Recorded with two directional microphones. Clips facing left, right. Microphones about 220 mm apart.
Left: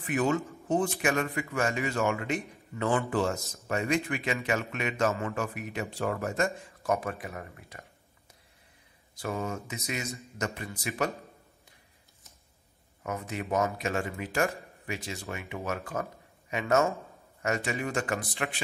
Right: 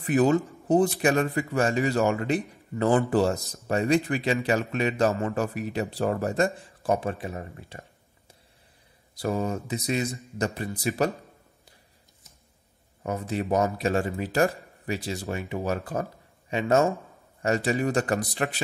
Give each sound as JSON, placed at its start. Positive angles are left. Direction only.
{"t": 0.0, "sound": "a man's voice", "side_deg": -35}
{"t": 9.1, "sound": "a man's voice", "side_deg": -35}
{"t": 13.0, "sound": "a man's voice", "side_deg": -35}